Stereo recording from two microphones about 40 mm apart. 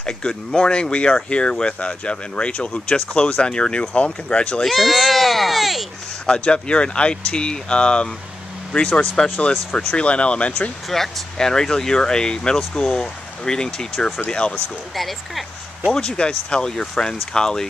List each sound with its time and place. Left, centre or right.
0.0 s speech: left
4.6 s speech: centre
6.2 s speech: left
10.9 s speech: centre
14.2 s speech: left
15.0 s speech: centre
15.9 s speech: centre